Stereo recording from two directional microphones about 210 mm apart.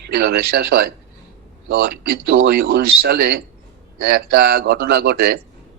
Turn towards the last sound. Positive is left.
turn(degrees=-50)  # may be behind; listen again after turning